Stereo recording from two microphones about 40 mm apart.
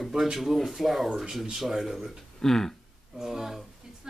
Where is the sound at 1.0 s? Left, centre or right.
Centre.